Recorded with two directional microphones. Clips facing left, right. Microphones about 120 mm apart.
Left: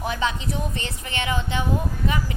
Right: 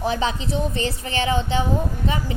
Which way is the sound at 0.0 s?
30° right (ahead or behind).